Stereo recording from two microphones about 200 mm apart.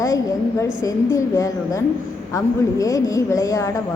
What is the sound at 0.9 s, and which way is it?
A woman's voice, 15° left (ahead or behind).